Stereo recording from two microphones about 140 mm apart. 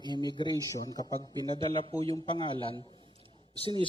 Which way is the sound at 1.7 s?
45° right (ahead or behind).